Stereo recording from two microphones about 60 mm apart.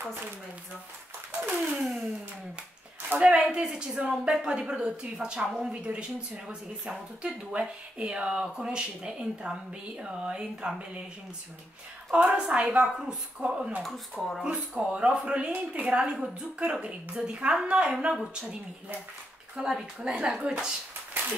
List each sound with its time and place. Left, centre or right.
1.5 s speech: centre
3.2 s speech: centre
12.1 s a woman's voice: right
13.8 s speech: centre
14.9 s speech: centre
21.2 s a sound: right